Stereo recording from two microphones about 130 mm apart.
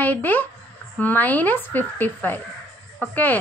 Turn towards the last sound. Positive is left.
turn(degrees=15)  # may be behind; listen again after turning